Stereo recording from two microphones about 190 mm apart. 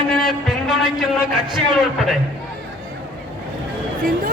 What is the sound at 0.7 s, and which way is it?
Speech, 5° right (ahead or behind).